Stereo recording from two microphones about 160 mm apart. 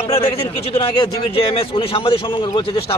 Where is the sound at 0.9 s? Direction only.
25° left (ahead or behind).